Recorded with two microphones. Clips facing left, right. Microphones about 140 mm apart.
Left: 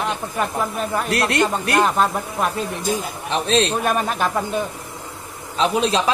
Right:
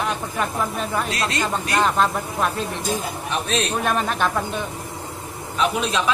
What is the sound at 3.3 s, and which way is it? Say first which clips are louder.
Speech: left 6 dB; 30° left (ahead or behind).